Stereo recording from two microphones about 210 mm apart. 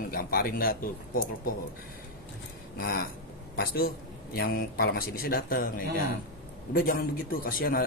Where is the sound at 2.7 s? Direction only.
45° left (ahead or behind).